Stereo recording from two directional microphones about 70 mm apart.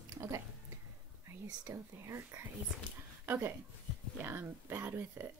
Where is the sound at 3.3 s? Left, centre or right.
Right.